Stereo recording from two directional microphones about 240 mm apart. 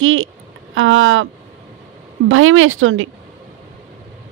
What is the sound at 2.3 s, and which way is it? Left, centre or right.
Speech, right.